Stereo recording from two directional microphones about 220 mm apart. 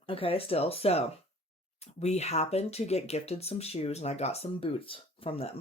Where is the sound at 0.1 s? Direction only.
25° left (ahead or behind).